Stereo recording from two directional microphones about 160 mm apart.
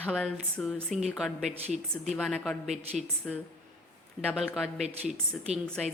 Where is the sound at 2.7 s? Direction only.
45° right (ahead or behind).